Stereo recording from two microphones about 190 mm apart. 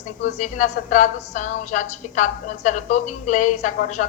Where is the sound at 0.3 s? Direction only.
40° left (ahead or behind).